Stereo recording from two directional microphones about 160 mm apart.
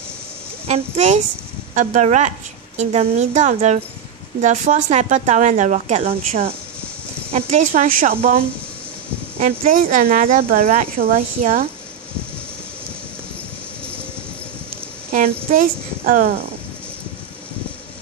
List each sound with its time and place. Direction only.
0.7 s speech: 45° right (ahead or behind)
6.0 s speech: 60° right (ahead or behind)
7.2 s speech: 45° right (ahead or behind)
9.4 s speech: 55° right (ahead or behind)
16.1 s speech: 55° right (ahead or behind)